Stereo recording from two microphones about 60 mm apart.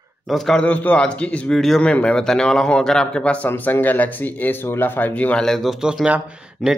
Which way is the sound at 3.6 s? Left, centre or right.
Left.